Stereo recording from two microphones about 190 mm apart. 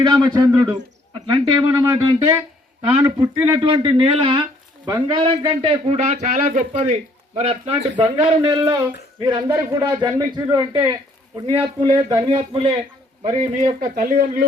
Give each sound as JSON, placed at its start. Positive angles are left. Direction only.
{"t": 0.0, "sound": "a man's voice", "side_deg": -20}
{"t": 3.4, "sound": "a man's voice", "side_deg": -25}
{"t": 13.9, "sound": "speech", "side_deg": -45}